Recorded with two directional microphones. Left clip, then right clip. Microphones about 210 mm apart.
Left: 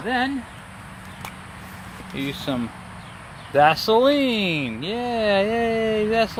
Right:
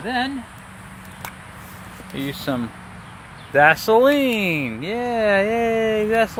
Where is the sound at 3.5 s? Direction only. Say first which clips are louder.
Right 2 dB; 15° right (ahead or behind).